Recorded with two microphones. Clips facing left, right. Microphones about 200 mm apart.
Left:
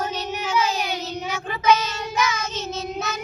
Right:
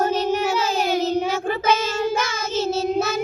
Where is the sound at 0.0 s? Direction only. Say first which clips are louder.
Right 8 dB; 50° right (ahead or behind).